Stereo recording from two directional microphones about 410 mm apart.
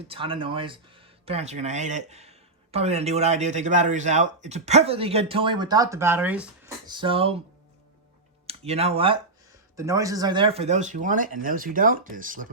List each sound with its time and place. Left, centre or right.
0.1 s speech: centre
8.4 s speech: centre